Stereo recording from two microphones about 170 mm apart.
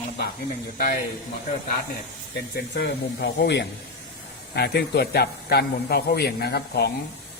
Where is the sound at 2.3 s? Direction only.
75° left (ahead or behind).